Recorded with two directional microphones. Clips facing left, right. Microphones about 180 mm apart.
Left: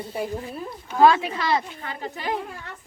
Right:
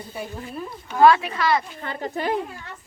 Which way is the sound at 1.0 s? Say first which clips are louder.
Right 2 dB; 20° left (ahead or behind).